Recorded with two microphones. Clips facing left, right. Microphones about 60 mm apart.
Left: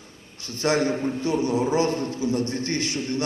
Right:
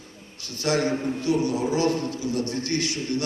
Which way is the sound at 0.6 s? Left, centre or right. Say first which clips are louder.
Left 1 dB; left.